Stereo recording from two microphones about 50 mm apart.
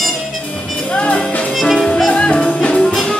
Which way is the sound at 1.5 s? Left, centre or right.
Centre.